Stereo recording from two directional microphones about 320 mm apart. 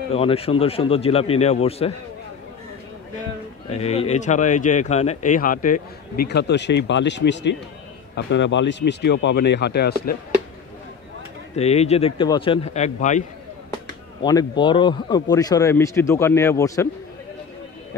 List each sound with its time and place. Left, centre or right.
0.1 s speech: centre
3.7 s speech: centre
11.5 s speech: centre
14.2 s speech: centre